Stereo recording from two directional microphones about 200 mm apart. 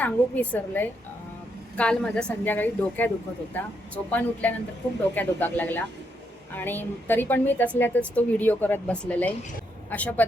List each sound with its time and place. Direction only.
0.0 s a woman's voice: 5° left (ahead or behind)